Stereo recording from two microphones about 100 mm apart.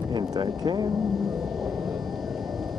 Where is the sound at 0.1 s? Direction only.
45° right (ahead or behind).